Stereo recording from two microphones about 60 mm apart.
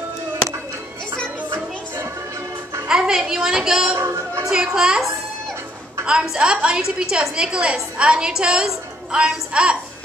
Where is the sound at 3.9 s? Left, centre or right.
Right.